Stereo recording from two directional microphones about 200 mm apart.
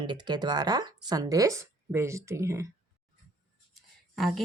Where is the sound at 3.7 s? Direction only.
Centre (ahead or behind).